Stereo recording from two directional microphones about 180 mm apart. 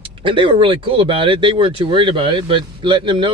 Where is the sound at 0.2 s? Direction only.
25° right (ahead or behind).